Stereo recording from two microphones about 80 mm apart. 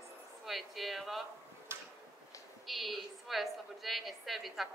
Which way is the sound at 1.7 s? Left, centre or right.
Right.